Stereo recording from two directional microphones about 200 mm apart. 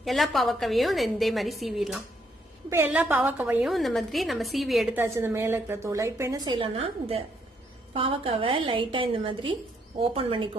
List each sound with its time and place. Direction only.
0.0 s a woman's voice: centre (ahead or behind)
2.6 s a woman's voice: 10° right (ahead or behind)
5.0 s a woman's voice: 15° right (ahead or behind)